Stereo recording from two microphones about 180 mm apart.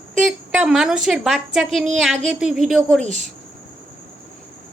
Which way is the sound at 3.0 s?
40° right (ahead or behind).